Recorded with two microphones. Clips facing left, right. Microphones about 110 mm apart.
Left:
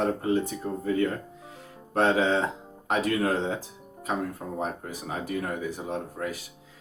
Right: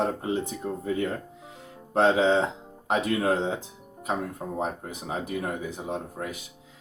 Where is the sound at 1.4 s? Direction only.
20° right (ahead or behind).